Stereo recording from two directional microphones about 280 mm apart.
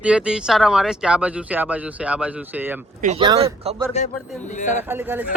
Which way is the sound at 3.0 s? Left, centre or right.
Centre.